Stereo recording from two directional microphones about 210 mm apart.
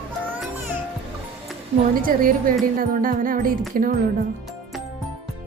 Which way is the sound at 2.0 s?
40° right (ahead or behind).